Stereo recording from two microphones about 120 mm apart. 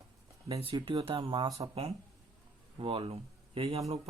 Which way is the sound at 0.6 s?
45° right (ahead or behind).